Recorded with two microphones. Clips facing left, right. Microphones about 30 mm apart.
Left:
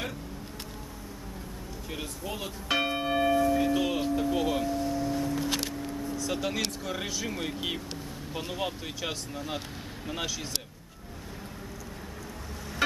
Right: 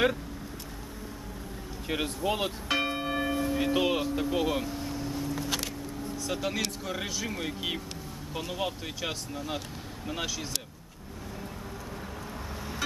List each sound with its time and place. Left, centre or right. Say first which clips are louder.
1.9 s speech: right 8 dB; right
2.7 s church bell: left 3 dB; centre
3.5 s music: even; right
4.0 s vehicle: left 1 dB; centre
5.1 s music: left 3 dB; centre
6.1 s speech: even; centre